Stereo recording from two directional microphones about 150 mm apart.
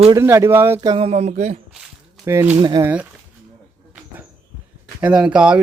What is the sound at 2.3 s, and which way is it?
Speech, 20° right (ahead or behind).